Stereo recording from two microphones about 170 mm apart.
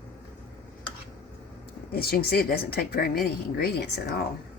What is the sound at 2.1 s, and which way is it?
Speech, 65° left (ahead or behind).